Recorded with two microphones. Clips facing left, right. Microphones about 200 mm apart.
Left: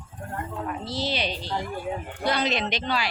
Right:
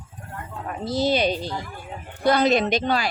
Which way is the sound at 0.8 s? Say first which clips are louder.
Right 10 dB; 45° right (ahead or behind).